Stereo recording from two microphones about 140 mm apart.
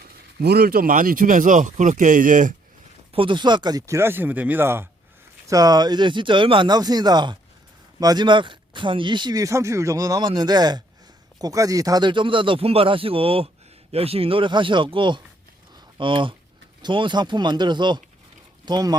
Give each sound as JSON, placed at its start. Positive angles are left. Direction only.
{"t": 0.5, "sound": "speech", "side_deg": -90}
{"t": 3.1, "sound": "speech", "side_deg": -40}